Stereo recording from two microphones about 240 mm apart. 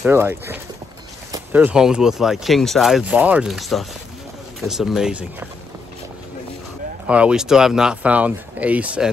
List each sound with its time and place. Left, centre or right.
0.0 s speech: centre
7.1 s speech: centre